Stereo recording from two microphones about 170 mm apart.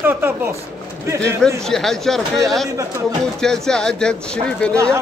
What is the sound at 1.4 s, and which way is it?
Speech, 5° left (ahead or behind).